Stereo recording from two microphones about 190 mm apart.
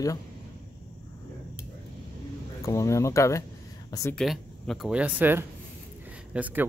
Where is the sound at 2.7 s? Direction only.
15° left (ahead or behind).